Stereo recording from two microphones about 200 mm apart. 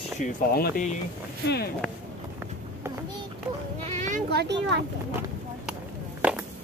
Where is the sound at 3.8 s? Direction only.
35° right (ahead or behind).